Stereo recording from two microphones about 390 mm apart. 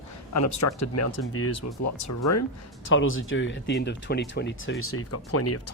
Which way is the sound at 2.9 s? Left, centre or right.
Left.